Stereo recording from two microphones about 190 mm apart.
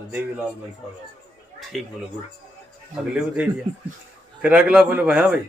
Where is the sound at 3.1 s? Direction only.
5° right (ahead or behind).